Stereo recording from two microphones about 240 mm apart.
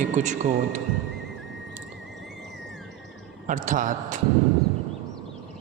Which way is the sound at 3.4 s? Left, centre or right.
Right.